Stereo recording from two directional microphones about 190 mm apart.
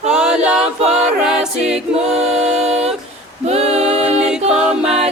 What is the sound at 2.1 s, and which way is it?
Music, 35° right (ahead or behind).